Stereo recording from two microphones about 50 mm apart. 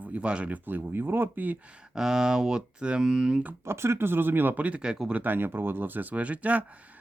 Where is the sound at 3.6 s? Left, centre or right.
Right.